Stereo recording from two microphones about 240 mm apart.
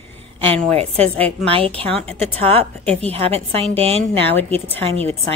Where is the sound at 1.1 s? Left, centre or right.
Centre.